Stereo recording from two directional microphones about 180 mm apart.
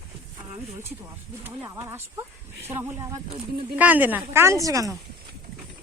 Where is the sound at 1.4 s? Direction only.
15° right (ahead or behind).